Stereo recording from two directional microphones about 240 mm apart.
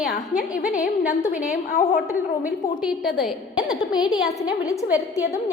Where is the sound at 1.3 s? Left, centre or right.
Left.